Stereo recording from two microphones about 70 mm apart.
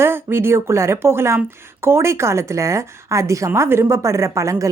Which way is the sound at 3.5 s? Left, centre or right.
Right.